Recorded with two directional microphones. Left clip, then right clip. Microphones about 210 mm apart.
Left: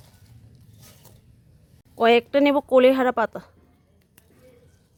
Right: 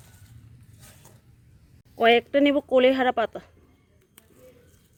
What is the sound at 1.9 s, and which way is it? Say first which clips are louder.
Speech: left 1 dB; 10° left (ahead or behind).